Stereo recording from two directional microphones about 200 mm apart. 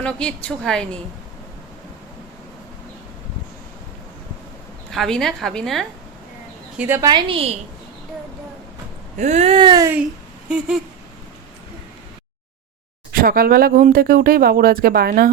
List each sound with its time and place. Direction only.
0.0 s a woman's voice: 5° left (ahead or behind)
4.9 s a woman's voice: centre (ahead or behind)
6.7 s speech: 10° right (ahead or behind)
7.1 s a sound: 25° right (ahead or behind)
9.1 s a sound: 35° right (ahead or behind); by 9.9 s 20° right (ahead or behind)
13.1 s speech: 45° right (ahead or behind)